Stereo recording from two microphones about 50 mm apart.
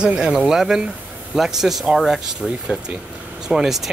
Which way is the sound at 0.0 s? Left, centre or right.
Centre.